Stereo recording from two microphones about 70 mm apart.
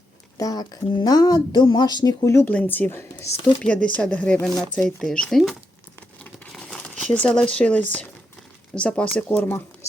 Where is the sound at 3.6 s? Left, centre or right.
Centre.